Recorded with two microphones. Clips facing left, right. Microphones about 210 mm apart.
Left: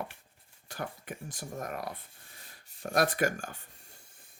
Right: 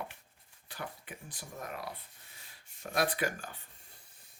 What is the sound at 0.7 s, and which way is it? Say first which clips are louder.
Speech: left 5 dB; 45° left (ahead or behind).